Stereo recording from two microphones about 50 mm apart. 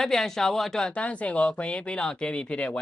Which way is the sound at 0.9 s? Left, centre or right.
Left.